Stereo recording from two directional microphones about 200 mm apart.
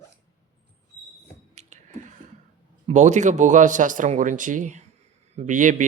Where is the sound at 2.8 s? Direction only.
35° right (ahead or behind).